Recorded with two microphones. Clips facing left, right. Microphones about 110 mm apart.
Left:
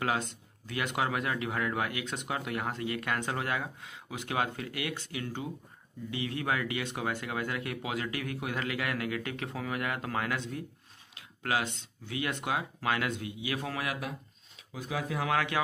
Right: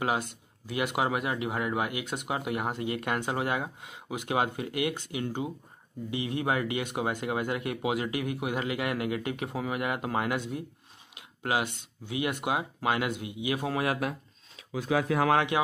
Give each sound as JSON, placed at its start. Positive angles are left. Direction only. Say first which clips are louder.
{"t": 0.7, "sound": "speech", "louder": "right 3 dB", "side_deg": -15}
{"t": 14.7, "sound": "speech", "louder": "right 8 dB", "side_deg": -85}
{"t": 15.3, "sound": "speech", "louder": "right 4 dB", "side_deg": -20}